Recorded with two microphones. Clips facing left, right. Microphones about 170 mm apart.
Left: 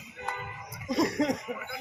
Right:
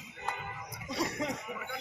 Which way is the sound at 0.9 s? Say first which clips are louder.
Left 8 dB; 40° left (ahead or behind).